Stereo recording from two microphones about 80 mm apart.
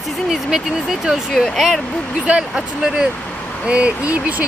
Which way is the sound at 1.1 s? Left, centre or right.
Centre.